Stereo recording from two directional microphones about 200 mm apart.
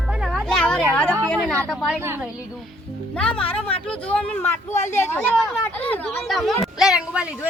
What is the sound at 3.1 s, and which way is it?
Speech, 5° left (ahead or behind).